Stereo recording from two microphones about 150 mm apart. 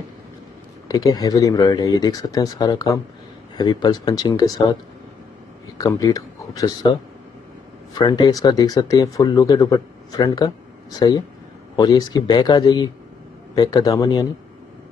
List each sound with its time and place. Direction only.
0.8 s speech: 25° left (ahead or behind)
5.8 s speech: 25° left (ahead or behind)